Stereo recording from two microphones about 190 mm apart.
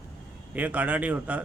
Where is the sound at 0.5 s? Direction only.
10° right (ahead or behind).